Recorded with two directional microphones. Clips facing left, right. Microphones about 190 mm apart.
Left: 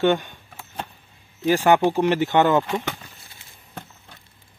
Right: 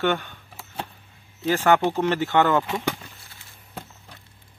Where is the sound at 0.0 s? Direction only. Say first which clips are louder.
Left 4 dB; 15° left (ahead or behind).